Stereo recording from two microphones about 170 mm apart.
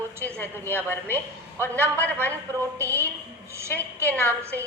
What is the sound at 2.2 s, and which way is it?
Speech, 15° right (ahead or behind).